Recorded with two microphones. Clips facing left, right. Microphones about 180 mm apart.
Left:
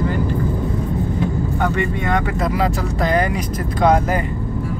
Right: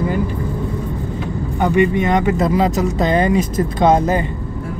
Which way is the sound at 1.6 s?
20° right (ahead or behind).